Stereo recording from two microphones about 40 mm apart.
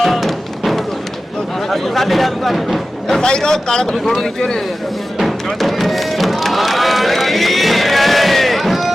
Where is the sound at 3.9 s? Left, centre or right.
Centre.